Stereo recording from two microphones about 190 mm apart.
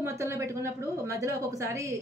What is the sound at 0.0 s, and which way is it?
Speech, 15° right (ahead or behind).